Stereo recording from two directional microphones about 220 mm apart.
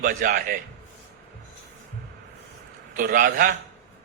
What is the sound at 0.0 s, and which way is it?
Speech, 45° right (ahead or behind).